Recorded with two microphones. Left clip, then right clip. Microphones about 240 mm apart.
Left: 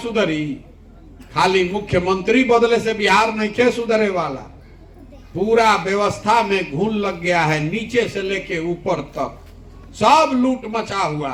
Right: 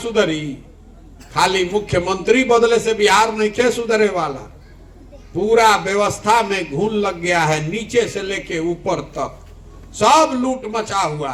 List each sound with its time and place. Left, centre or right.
0.0 s a man's voice: right
5.5 s a man's voice: right